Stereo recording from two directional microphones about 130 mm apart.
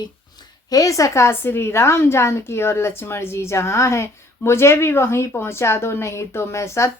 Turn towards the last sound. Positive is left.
turn(degrees=20)  # may be behind; listen again after turning